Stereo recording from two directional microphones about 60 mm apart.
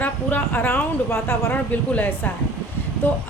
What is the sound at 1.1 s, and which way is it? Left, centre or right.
Speech, left.